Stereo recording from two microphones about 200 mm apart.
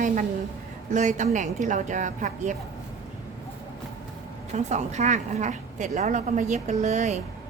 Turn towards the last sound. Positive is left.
turn(degrees=-35)  # may be behind; listen again after turning